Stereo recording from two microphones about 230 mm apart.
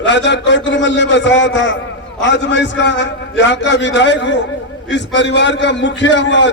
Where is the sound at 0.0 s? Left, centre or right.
Left.